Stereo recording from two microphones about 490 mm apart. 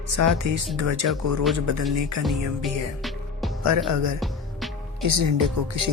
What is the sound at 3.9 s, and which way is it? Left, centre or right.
Speech, right.